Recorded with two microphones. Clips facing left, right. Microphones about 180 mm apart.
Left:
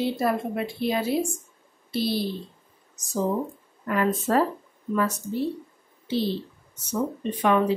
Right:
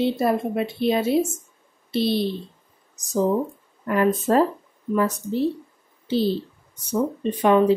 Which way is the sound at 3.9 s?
30° right (ahead or behind).